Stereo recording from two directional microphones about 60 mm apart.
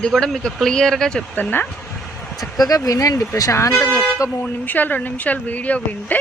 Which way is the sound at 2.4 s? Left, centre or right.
Left.